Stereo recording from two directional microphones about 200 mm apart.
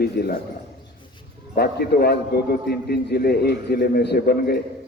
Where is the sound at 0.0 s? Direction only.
55° left (ahead or behind).